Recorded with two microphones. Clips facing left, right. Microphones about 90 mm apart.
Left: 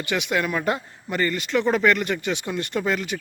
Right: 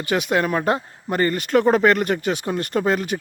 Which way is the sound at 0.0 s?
40° right (ahead or behind).